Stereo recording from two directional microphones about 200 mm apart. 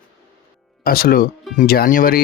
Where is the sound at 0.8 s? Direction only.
50° left (ahead or behind).